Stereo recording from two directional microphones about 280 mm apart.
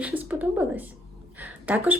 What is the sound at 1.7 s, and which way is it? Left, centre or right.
Speech, centre.